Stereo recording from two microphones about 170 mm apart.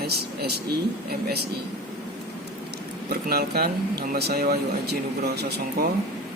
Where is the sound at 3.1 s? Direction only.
65° right (ahead or behind).